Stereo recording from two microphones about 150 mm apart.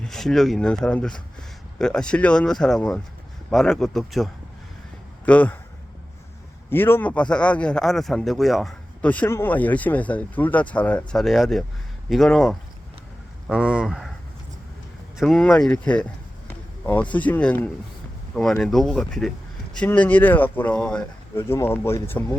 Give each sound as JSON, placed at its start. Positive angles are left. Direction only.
{"t": 0.0, "sound": "speech", "side_deg": 0}
{"t": 6.7, "sound": "a man's voice", "side_deg": 15}
{"t": 15.2, "sound": "a man's voice", "side_deg": 0}
{"t": 21.3, "sound": "a man's voice", "side_deg": 15}